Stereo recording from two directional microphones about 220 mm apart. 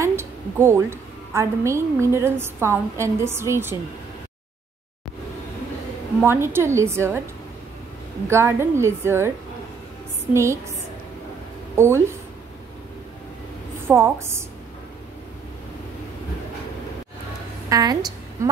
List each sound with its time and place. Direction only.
0.0 s a woman's voice: 10° right (ahead or behind)
6.2 s a woman's voice: 10° right (ahead or behind)
8.3 s a woman's voice: 10° right (ahead or behind)
10.3 s a woman's voice: 15° right (ahead or behind)
11.7 s speech: 10° right (ahead or behind)
13.8 s a woman's voice: 10° right (ahead or behind)
17.6 s a woman's voice: 15° right (ahead or behind)